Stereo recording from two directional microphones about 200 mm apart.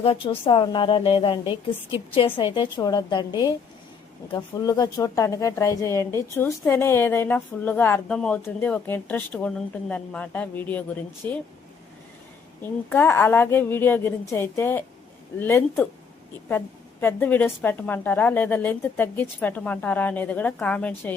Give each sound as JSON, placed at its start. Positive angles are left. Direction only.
{"t": 0.0, "sound": "a woman's voice", "side_deg": 30}
{"t": 12.6, "sound": "a woman's voice", "side_deg": 10}